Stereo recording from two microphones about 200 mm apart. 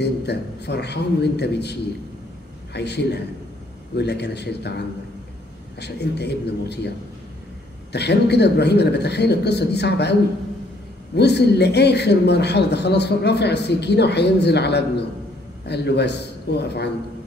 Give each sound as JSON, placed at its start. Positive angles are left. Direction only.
{"t": 0.0, "sound": "speech", "side_deg": 55}
{"t": 7.9, "sound": "speech", "side_deg": 55}
{"t": 11.1, "sound": "speech", "side_deg": 55}